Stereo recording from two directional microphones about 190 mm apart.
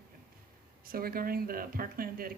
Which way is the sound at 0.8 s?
50° right (ahead or behind).